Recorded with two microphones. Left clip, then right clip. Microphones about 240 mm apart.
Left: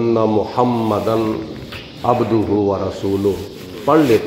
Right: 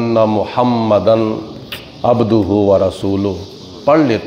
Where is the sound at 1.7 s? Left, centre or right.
Right.